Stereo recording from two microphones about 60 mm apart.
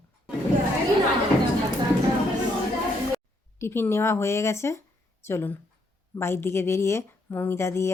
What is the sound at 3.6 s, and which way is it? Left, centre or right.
A woman's voice, left.